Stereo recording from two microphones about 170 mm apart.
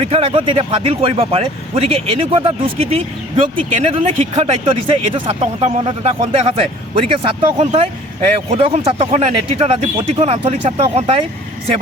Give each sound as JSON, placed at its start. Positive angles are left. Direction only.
{"t": 0.0, "sound": "speech", "side_deg": -35}